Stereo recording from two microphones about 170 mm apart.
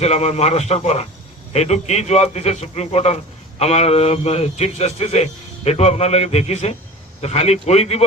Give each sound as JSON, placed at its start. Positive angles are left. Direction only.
{"t": 0.0, "sound": "a man's voice", "side_deg": 40}